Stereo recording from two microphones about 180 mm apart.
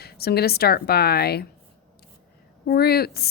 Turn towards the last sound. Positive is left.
turn(degrees=60)  # may be behind; listen again after turning